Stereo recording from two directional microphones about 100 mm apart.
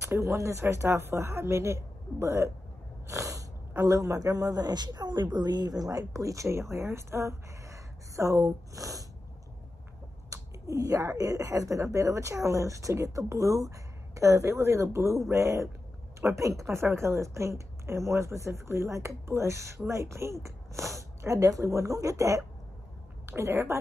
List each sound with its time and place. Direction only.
0.0 s a woman's voice: 30° right (ahead or behind)
10.3 s a woman's voice: 30° right (ahead or behind)